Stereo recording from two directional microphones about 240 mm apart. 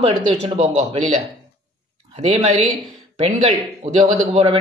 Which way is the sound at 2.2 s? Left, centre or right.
Right.